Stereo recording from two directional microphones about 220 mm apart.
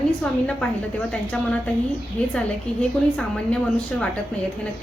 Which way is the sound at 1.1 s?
5° left (ahead or behind).